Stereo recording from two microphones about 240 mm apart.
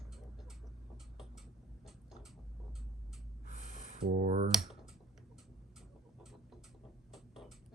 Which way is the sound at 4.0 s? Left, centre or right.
Right.